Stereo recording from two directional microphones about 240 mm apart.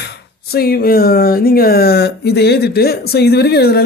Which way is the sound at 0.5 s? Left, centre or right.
Left.